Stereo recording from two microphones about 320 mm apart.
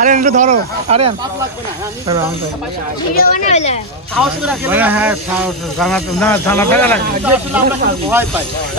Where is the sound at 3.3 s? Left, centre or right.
Left.